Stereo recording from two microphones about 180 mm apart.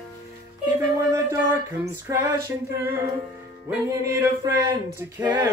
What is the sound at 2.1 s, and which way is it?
Music, 15° right (ahead or behind).